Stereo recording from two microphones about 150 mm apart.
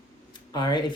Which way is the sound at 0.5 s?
30° left (ahead or behind).